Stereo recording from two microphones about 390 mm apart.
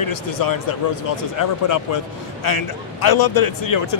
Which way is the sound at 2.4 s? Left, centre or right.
Left.